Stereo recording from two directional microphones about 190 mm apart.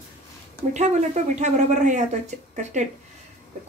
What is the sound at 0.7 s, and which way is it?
Speech, 35° right (ahead or behind).